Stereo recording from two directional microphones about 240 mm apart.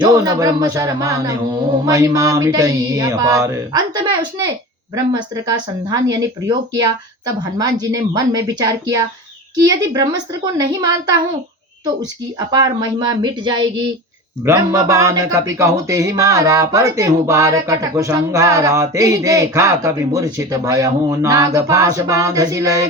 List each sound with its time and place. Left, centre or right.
0.0 s speech: centre
12.5 s speech: centre